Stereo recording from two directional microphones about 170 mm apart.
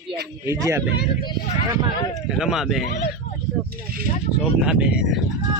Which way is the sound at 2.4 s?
Centre (ahead or behind).